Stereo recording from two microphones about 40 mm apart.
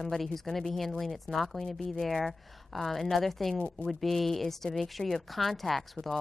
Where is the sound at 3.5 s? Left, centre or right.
Left.